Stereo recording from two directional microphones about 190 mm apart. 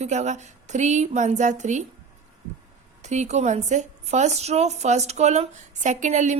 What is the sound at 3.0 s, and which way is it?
A woman's voice, 35° right (ahead or behind).